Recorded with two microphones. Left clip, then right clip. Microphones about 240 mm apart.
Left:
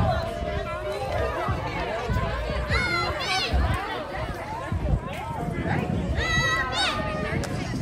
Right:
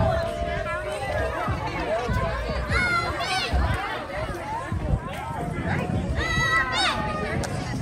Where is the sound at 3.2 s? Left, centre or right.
Centre.